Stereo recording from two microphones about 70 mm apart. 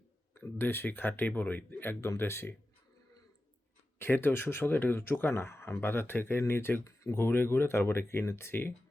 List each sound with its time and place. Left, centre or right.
0.3 s speech: left
3.9 s speech: left